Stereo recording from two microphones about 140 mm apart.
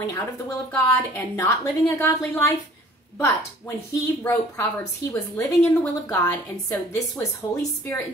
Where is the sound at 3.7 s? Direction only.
15° left (ahead or behind).